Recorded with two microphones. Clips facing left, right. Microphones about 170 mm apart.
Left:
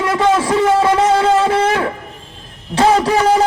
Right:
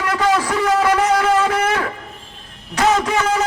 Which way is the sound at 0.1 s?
25° left (ahead or behind).